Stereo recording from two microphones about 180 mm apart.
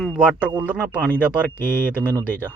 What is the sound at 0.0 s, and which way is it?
Radio, 5° right (ahead or behind).